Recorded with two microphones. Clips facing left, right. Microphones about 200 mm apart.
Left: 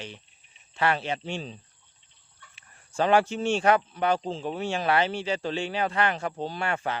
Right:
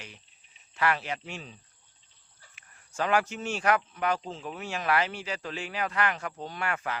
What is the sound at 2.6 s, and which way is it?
Speech, 30° left (ahead or behind).